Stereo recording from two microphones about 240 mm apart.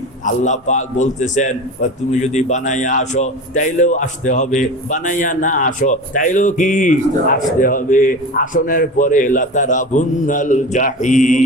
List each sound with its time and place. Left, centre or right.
0.3 s a man's voice: left